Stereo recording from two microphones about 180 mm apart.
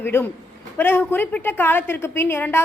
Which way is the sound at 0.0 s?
10° left (ahead or behind).